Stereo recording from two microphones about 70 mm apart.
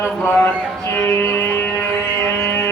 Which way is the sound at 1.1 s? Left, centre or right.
Left.